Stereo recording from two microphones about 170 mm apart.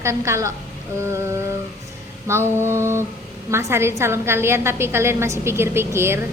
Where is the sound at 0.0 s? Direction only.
15° right (ahead or behind).